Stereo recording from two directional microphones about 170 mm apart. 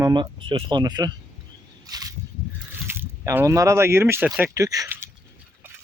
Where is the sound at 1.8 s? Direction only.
20° right (ahead or behind).